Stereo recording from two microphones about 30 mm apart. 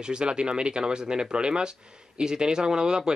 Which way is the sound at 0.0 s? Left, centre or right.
Right.